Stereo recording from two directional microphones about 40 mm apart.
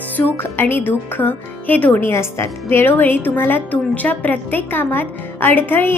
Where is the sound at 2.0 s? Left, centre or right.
Left.